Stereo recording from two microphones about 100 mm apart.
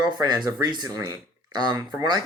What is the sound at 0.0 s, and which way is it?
Speech, 45° right (ahead or behind).